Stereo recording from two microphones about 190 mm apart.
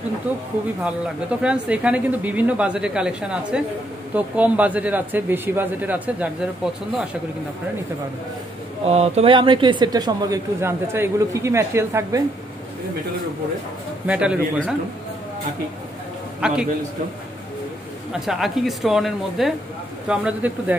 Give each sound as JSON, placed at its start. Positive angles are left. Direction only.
{"t": 0.8, "sound": "speech", "side_deg": -5}
{"t": 8.8, "sound": "speech", "side_deg": -35}
{"t": 14.0, "sound": "speech", "side_deg": -5}
{"t": 16.3, "sound": "a man's voice", "side_deg": -5}
{"t": 18.2, "sound": "speech", "side_deg": 0}